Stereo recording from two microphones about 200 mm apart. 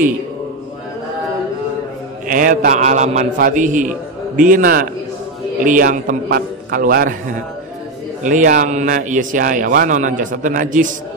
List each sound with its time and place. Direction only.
2.2 s a man's voice: 40° right (ahead or behind)
8.2 s a man's voice: 40° right (ahead or behind)